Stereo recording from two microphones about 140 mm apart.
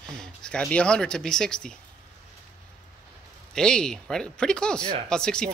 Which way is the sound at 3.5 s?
5° left (ahead or behind).